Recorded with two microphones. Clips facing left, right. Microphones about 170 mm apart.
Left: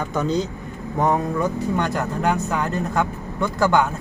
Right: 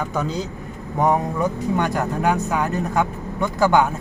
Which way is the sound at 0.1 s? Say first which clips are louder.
Left 3 dB; 5° right (ahead or behind).